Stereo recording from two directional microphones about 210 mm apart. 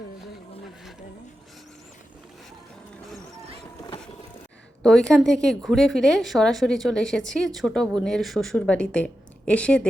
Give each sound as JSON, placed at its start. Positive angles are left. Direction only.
{"t": 3.8, "sound": "vehicle", "side_deg": 20}
{"t": 4.8, "sound": "a woman's voice", "side_deg": 5}